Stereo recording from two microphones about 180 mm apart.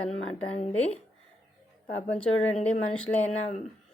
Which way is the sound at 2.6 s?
5° left (ahead or behind).